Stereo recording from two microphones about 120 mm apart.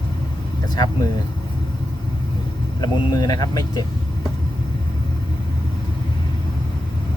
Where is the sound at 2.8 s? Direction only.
35° left (ahead or behind).